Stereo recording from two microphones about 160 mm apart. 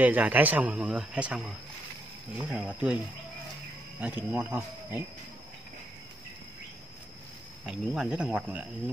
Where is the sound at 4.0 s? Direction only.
10° right (ahead or behind).